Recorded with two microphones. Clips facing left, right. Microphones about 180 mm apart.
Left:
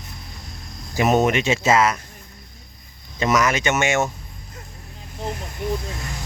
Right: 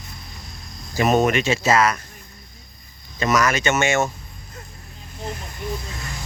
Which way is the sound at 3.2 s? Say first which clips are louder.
Even; 20° left (ahead or behind).